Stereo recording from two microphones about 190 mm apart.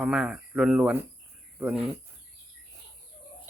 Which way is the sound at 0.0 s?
5° right (ahead or behind).